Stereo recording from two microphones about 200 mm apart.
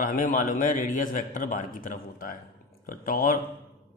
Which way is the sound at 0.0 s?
45° left (ahead or behind).